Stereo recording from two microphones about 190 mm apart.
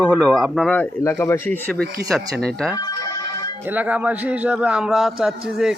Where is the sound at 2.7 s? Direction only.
20° left (ahead or behind).